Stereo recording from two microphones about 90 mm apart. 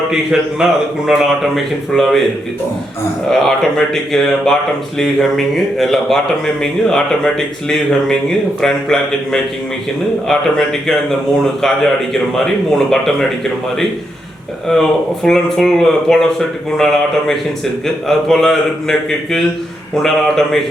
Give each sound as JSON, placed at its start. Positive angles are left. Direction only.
{"t": 0.1, "sound": "speech", "side_deg": -5}
{"t": 3.2, "sound": "speech", "side_deg": 5}
{"t": 12.7, "sound": "speech", "side_deg": 5}
{"t": 14.7, "sound": "speech", "side_deg": 5}